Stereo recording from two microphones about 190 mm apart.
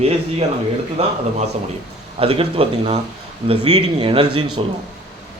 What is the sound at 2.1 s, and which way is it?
Speech, 30° right (ahead or behind).